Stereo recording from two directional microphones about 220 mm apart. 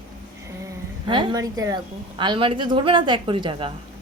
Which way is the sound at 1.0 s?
20° right (ahead or behind).